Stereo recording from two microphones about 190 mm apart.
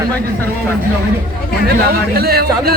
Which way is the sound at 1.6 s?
55° right (ahead or behind).